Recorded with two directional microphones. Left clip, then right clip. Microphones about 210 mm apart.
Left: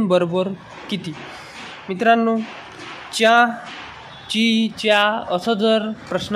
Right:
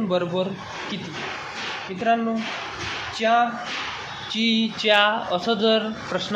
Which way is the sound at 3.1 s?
45° left (ahead or behind).